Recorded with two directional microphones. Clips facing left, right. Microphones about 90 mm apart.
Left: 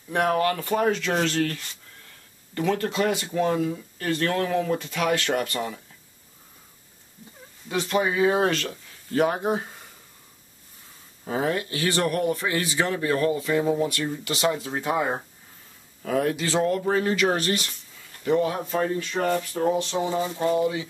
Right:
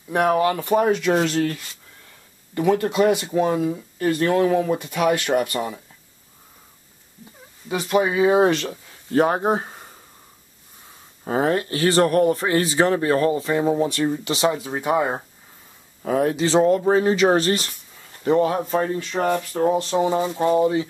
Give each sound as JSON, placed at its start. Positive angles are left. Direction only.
{"t": 0.1, "sound": "speech", "side_deg": -15}
{"t": 7.6, "sound": "speech", "side_deg": -10}
{"t": 9.1, "sound": "speech", "side_deg": -35}
{"t": 11.2, "sound": "speech", "side_deg": -40}
{"t": 16.0, "sound": "speech", "side_deg": -25}
{"t": 18.8, "sound": "speech", "side_deg": -25}